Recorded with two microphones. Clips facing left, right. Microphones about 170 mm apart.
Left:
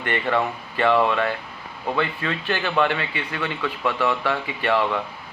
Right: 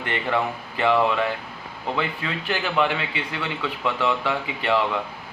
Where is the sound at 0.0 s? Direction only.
15° right (ahead or behind).